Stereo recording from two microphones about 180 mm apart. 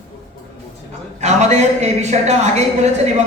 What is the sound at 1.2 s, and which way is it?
A woman's voice, 40° right (ahead or behind).